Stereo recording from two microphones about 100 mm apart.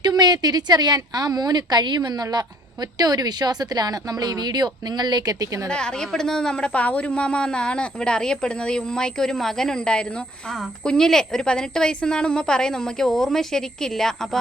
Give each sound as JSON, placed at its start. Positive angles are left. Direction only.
{"t": 0.0, "sound": "speech", "side_deg": -45}
{"t": 5.6, "sound": "a woman's voice", "side_deg": 10}